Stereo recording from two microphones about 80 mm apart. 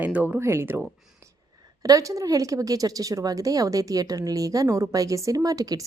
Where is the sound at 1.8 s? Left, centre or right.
Right.